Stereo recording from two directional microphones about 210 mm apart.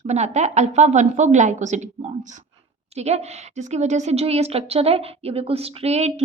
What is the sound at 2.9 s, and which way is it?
A woman's voice, 30° right (ahead or behind).